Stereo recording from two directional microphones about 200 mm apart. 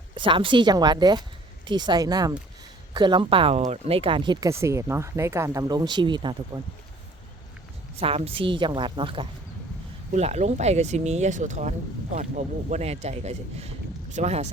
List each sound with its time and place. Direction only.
0.1 s speech: 25° right (ahead or behind)
7.9 s speech: 30° right (ahead or behind)
12.7 s speech: 35° right (ahead or behind)